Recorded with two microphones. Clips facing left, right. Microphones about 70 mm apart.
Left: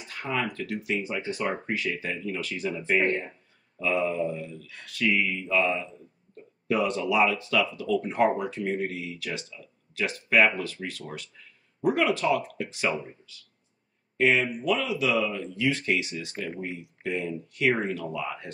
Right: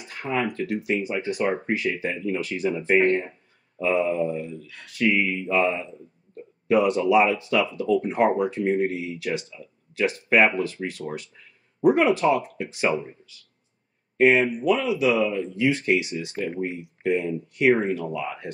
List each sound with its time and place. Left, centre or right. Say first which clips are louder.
0.1 s a sound: right 3 dB; right
0.5 s speech: right 5 dB; right
3.8 s speech: right 4 dB; right
14.1 s speech: right 5 dB; right
16.4 s speech: right 6 dB; right